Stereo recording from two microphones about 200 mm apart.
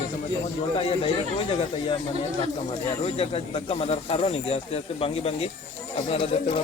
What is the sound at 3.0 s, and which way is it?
Speech, 30° left (ahead or behind).